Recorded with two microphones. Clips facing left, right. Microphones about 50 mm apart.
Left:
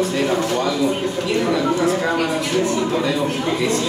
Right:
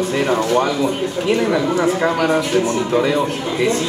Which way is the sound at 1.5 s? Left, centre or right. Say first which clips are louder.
Right 1 dB; centre.